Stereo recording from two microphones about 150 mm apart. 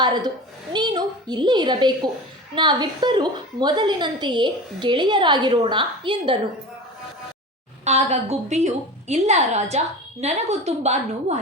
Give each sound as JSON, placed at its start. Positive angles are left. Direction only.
{"t": 0.0, "sound": "a woman's voice", "side_deg": -30}
{"t": 7.9, "sound": "a woman's voice", "side_deg": -45}